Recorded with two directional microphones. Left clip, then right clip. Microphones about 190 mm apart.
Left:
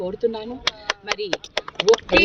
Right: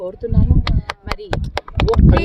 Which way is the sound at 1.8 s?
40° right (ahead or behind).